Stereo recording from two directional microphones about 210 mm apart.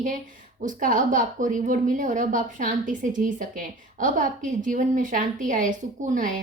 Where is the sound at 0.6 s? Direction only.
40° right (ahead or behind).